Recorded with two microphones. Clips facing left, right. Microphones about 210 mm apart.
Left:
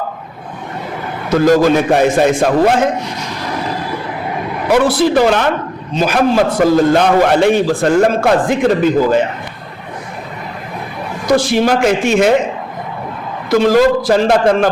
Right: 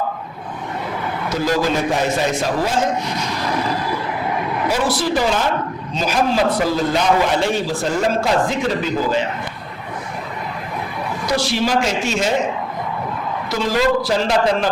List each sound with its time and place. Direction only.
1.3 s a man's voice: 50° left (ahead or behind)
4.7 s a man's voice: 60° left (ahead or behind)
11.3 s a man's voice: 50° left (ahead or behind)
13.5 s a man's voice: 55° left (ahead or behind)